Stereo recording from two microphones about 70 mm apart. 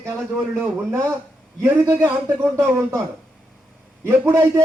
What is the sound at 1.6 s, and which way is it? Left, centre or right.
Speech, right.